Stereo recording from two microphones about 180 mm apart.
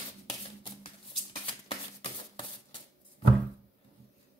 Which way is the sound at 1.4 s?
25° left (ahead or behind).